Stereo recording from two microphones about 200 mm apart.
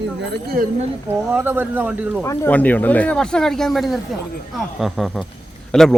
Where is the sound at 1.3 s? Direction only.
10° right (ahead or behind).